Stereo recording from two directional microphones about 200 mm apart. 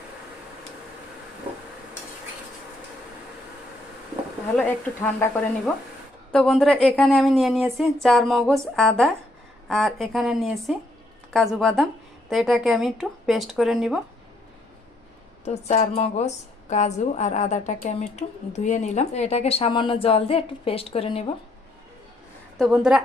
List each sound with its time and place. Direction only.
5.0 s speech: 10° left (ahead or behind)
15.4 s a woman's voice: 35° left (ahead or behind)
22.5 s speech: centre (ahead or behind)